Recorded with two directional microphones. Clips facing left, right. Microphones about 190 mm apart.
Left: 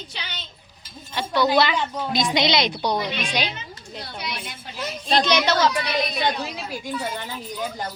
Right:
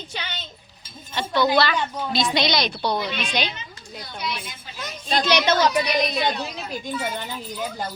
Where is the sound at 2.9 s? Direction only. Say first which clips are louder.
Left 1 dB; 5° right (ahead or behind).